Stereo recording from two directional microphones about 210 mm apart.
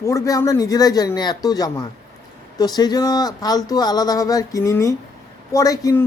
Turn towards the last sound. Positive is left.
turn(degrees=15)  # may be behind; listen again after turning